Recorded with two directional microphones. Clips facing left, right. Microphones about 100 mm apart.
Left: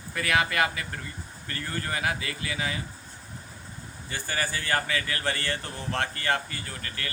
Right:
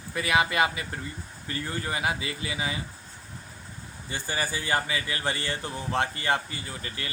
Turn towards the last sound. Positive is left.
turn(degrees=-20)  # may be behind; listen again after turning